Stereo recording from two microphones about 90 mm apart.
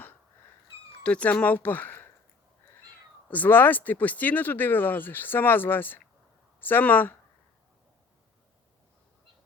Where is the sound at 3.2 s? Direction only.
20° left (ahead or behind).